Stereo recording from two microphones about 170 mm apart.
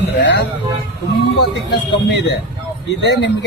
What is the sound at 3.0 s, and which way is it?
Speech, 90° left.